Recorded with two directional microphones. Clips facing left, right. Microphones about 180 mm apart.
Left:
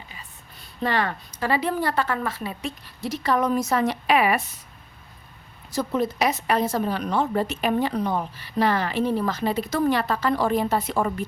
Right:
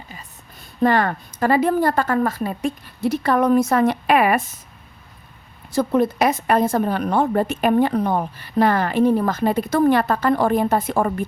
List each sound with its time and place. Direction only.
0.8 s a woman's voice: 50° right (ahead or behind)
5.7 s a woman's voice: 55° right (ahead or behind)